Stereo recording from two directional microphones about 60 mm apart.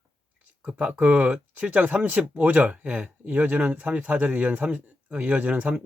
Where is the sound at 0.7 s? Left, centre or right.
Centre.